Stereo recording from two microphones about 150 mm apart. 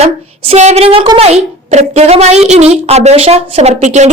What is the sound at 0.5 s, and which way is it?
A woman's voice, 50° right (ahead or behind).